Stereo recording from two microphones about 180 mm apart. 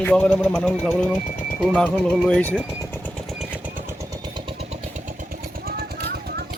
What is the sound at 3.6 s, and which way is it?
Vehicle, 10° right (ahead or behind).